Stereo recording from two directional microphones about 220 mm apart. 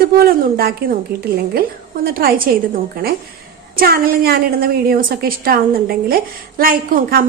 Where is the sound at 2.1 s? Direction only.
40° right (ahead or behind).